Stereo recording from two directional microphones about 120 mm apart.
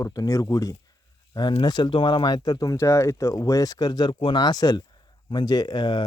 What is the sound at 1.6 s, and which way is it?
Speech, 40° left (ahead or behind).